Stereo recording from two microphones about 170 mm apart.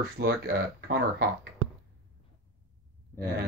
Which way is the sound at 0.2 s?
70° right (ahead or behind).